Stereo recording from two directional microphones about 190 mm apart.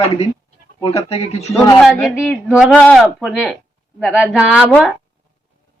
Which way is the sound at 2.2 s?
5° right (ahead or behind).